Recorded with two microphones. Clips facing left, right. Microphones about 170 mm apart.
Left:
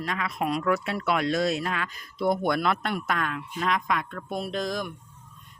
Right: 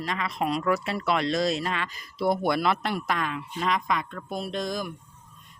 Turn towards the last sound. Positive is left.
turn(degrees=0)  # may be behind; listen again after turning